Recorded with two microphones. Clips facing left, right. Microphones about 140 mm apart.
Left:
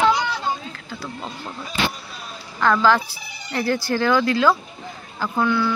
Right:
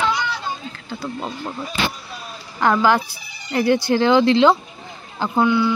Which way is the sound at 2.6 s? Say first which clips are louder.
Right 1 dB; 15° right (ahead or behind).